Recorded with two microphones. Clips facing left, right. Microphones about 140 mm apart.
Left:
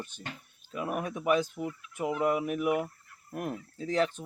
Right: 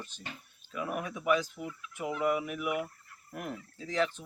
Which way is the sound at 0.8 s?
40° left (ahead or behind).